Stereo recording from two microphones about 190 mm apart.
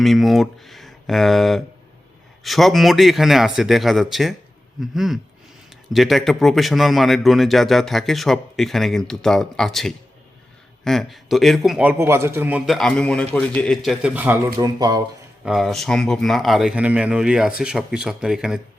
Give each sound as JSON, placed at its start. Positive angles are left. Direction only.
{"t": 0.0, "sound": "a man's voice", "side_deg": 0}
{"t": 14.8, "sound": "speech", "side_deg": -20}
{"t": 15.4, "sound": "a man's voice", "side_deg": 0}